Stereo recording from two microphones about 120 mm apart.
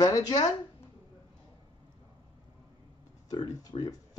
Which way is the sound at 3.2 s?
40° left (ahead or behind).